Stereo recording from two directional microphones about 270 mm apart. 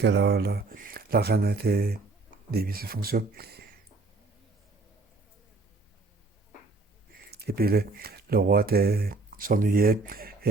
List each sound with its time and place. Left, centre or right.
0.0 s speech: right
7.3 s speech: right